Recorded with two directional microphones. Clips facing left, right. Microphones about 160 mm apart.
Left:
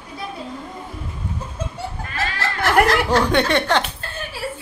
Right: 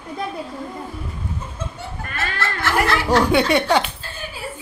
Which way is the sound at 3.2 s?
10° right (ahead or behind).